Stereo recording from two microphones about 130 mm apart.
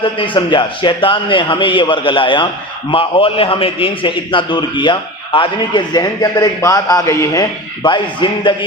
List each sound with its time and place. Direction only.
0.0 s a man's voice: 40° left (ahead or behind); by 7.9 s 25° left (ahead or behind)
7.9 s a man's voice: 40° left (ahead or behind)